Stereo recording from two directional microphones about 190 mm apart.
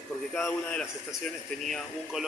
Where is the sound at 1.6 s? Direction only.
Centre (ahead or behind).